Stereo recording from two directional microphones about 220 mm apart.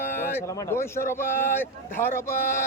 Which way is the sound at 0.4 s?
15° left (ahead or behind).